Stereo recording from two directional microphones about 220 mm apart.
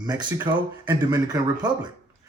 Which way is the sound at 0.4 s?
15° right (ahead or behind).